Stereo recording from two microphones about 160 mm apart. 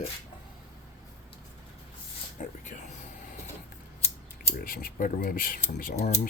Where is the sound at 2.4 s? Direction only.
50° left (ahead or behind).